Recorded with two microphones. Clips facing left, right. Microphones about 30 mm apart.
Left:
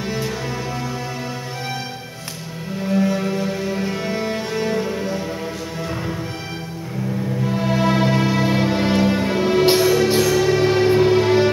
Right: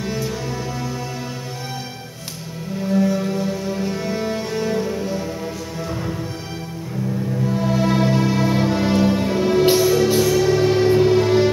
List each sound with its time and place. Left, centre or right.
2.9 s music: left
7.4 s music: left
9.7 s music: left
10.3 s music: left